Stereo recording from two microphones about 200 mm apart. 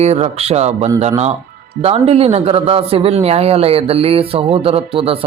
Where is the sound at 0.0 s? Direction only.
30° right (ahead or behind).